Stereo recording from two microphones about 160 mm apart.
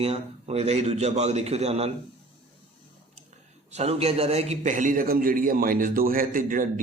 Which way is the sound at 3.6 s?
40° right (ahead or behind).